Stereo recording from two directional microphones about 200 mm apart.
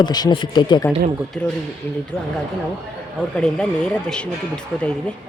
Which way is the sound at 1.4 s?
5° left (ahead or behind).